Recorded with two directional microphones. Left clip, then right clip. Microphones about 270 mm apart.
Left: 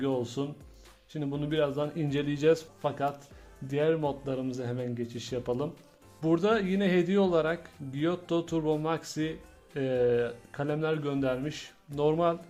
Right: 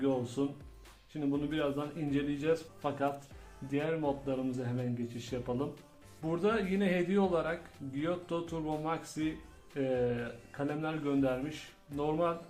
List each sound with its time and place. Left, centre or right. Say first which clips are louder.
0.0 s a man's voice: left 2 dB; left